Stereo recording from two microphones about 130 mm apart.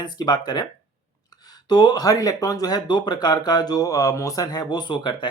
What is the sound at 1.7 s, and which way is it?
Speech, 30° left (ahead or behind).